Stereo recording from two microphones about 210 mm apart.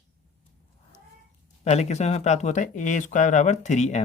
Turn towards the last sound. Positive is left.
turn(degrees=35)  # may be behind; listen again after turning